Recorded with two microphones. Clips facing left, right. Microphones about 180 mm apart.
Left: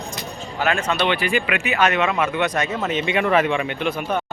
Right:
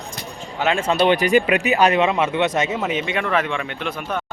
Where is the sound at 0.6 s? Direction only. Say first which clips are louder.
Right 3 dB; 25° right (ahead or behind).